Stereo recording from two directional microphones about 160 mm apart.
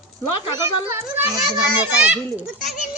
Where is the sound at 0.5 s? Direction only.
15° right (ahead or behind).